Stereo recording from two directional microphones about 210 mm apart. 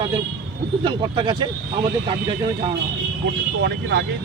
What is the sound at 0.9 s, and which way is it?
Speech, 25° right (ahead or behind).